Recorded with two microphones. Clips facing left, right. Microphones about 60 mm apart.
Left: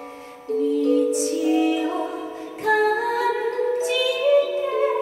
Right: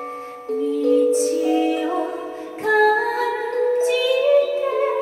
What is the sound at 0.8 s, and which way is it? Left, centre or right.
Music, right.